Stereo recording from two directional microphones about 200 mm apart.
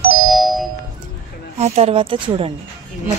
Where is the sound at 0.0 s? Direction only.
45° right (ahead or behind).